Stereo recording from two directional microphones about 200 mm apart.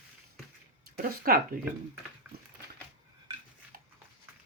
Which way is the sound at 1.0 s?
45° right (ahead or behind).